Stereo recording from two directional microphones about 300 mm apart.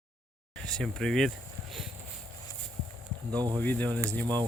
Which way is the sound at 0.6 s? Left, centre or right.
Centre.